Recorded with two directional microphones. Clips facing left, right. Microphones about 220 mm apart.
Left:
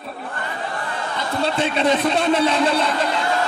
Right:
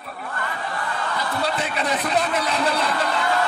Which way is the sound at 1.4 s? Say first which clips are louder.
Left 8 dB; 25° left (ahead or behind).